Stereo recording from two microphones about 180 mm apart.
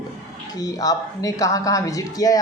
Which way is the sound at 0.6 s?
20° left (ahead or behind).